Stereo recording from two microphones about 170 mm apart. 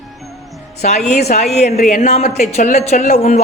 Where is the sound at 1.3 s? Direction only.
40° left (ahead or behind).